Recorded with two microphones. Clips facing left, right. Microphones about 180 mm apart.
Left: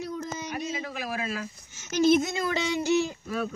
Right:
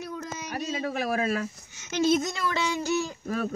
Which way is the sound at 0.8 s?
50° right (ahead or behind).